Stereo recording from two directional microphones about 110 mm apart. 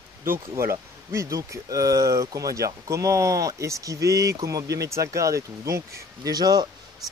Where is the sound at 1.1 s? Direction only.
30° right (ahead or behind).